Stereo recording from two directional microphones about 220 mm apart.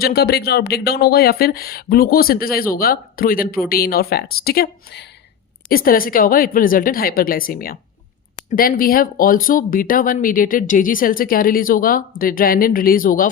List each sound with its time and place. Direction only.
0.0 s speech: 45° left (ahead or behind)